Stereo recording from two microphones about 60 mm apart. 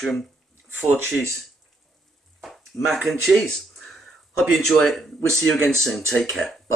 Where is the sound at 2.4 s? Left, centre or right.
Centre.